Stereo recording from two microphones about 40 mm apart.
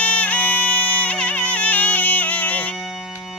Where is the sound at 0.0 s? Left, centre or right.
Left.